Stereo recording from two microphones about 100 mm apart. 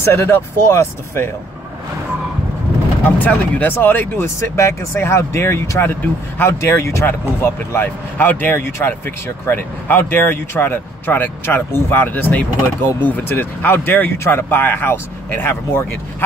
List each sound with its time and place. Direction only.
0.0 s speech: 25° left (ahead or behind)
3.3 s speech: 15° left (ahead or behind)